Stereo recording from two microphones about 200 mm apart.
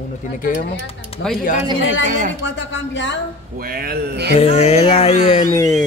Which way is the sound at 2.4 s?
65° left (ahead or behind).